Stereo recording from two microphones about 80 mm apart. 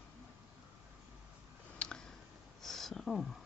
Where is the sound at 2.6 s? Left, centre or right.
Centre.